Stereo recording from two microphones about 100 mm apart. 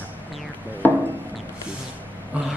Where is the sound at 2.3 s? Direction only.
15° right (ahead or behind).